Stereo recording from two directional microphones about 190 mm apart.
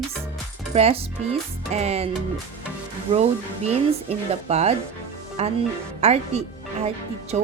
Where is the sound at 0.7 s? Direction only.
30° right (ahead or behind).